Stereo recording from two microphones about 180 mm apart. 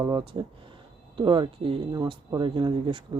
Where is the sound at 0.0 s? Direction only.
25° right (ahead or behind).